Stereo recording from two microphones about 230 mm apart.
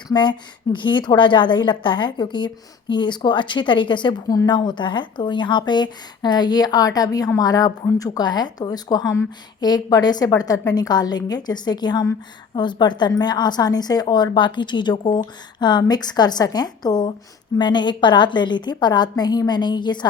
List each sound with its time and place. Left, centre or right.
0.1 s a woman's voice: centre